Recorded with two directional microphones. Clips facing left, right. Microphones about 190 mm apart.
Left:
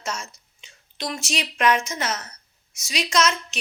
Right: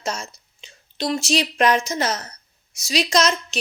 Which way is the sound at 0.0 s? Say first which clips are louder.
Right 3 dB; 35° right (ahead or behind).